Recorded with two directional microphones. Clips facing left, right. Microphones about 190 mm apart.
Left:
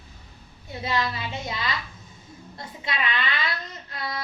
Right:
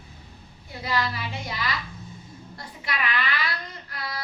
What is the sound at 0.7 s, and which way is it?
A woman's voice, 25° left (ahead or behind).